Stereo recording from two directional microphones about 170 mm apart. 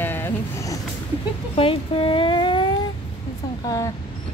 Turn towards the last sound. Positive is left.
turn(degrees=20)  # may be behind; listen again after turning